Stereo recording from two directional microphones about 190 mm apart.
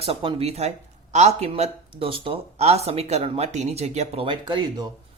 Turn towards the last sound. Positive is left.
turn(degrees=-20)  # may be behind; listen again after turning